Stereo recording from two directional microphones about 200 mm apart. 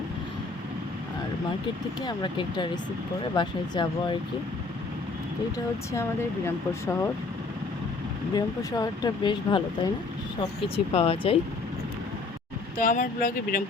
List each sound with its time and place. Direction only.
2.0 s speech: 20° left (ahead or behind)
5.9 s speech: 15° left (ahead or behind)
8.4 s speech: 20° left (ahead or behind)
10.9 s speech: 30° left (ahead or behind)
12.7 s speech: 40° left (ahead or behind)